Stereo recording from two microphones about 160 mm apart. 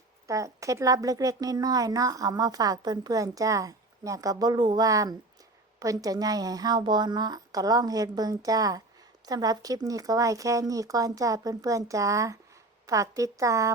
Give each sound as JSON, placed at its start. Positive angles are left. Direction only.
{"t": 0.3, "sound": "speech", "side_deg": -20}